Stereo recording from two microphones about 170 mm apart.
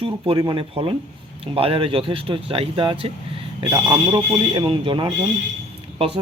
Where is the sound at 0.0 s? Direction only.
30° right (ahead or behind).